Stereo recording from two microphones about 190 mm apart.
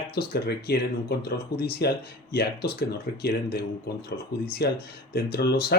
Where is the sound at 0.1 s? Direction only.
55° left (ahead or behind).